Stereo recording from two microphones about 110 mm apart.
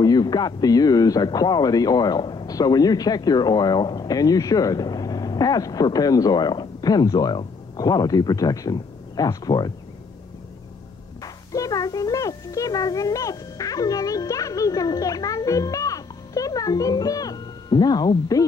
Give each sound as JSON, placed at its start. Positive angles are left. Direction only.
{"t": 0.0, "sound": "a man's voice", "side_deg": 40}
{"t": 11.5, "sound": "a child's voice", "side_deg": 30}